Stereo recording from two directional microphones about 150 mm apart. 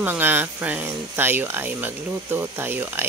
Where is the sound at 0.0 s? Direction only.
15° right (ahead or behind).